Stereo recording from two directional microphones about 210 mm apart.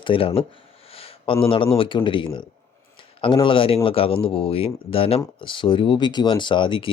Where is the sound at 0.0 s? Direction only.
25° left (ahead or behind).